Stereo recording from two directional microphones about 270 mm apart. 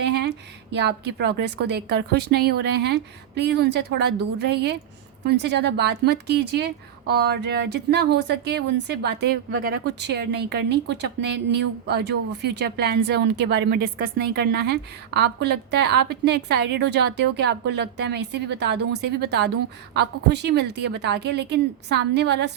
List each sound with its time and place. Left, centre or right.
0.0 s a woman's voice: right